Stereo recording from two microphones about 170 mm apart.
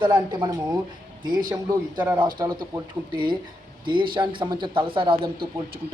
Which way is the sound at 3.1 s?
25° right (ahead or behind).